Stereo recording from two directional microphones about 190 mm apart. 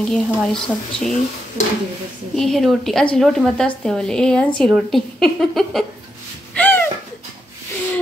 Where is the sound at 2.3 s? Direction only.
Centre (ahead or behind).